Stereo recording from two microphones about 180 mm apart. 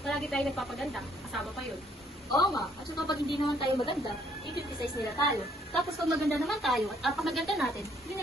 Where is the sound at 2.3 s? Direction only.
20° left (ahead or behind).